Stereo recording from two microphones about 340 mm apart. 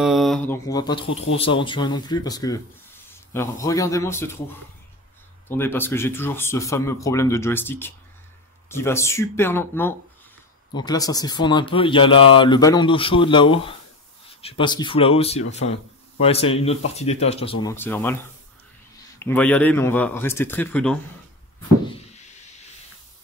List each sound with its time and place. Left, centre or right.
0.0 s speech: centre
5.5 s speech: centre
17.6 s a man's voice: centre